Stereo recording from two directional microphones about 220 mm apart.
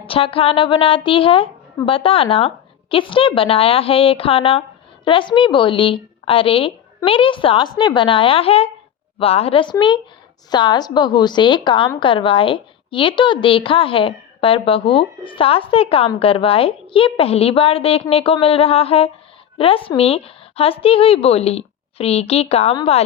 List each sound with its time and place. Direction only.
0.0 s a woman's voice: 25° left (ahead or behind)